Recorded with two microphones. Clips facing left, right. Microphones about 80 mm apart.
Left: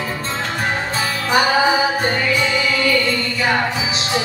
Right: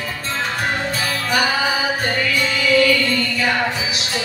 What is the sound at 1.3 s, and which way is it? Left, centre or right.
Music, left.